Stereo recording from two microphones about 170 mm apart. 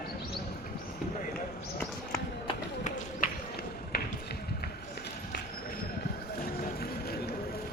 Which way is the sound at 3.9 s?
65° left (ahead or behind).